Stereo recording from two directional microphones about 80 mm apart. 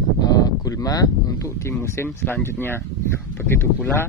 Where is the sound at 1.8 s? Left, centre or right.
Left.